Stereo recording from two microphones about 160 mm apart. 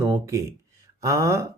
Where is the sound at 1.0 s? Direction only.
20° right (ahead or behind).